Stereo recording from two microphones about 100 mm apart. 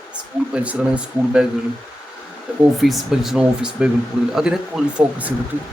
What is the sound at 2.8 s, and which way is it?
Speech, centre (ahead or behind).